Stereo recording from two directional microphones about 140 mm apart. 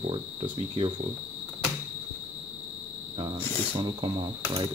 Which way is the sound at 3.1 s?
40° right (ahead or behind).